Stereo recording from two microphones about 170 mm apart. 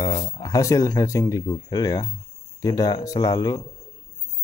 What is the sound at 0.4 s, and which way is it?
Speech, 20° left (ahead or behind).